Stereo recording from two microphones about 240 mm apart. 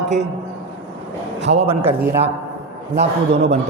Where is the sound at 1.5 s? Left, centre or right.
Right.